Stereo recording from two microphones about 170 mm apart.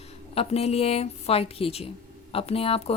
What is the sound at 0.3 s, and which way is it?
Speech, 35° left (ahead or behind).